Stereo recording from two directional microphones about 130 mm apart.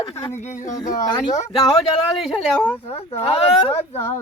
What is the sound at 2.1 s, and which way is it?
Speech, centre (ahead or behind).